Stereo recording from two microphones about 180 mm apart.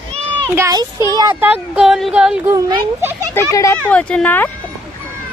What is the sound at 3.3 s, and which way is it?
Speech, 15° left (ahead or behind).